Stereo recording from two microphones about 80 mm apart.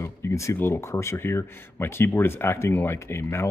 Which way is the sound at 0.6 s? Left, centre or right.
Left.